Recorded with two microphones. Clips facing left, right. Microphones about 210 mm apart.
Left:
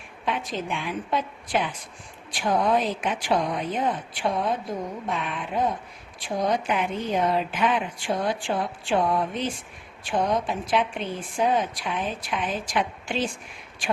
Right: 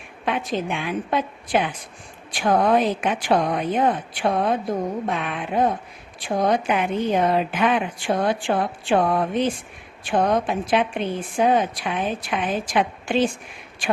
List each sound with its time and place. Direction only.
0.3 s speech: 60° right (ahead or behind)